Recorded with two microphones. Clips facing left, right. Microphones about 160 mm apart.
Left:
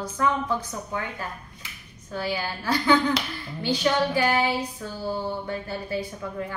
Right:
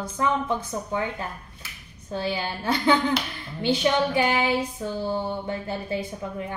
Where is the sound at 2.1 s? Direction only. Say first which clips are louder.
Right 1 dB; 25° right (ahead or behind).